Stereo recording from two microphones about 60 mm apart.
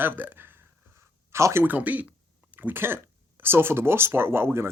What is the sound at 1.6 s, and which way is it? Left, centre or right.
Speech, right.